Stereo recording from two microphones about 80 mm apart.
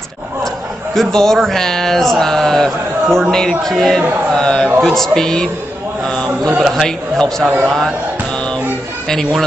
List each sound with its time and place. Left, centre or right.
0.9 s speech: centre
4.8 s a sound: centre
6.6 s speech: centre
9.1 s speech: centre